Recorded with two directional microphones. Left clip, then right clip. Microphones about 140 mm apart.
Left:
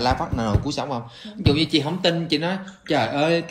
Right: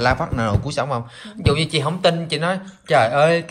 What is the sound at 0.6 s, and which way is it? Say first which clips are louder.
A man's voice: right 4 dB; 50° right (ahead or behind).